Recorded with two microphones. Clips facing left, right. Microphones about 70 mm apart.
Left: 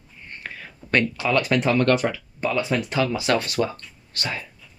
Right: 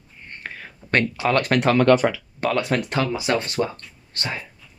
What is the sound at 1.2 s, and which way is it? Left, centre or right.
Speech, right.